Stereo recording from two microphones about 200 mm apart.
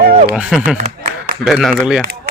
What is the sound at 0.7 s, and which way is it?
Speech, 40° right (ahead or behind).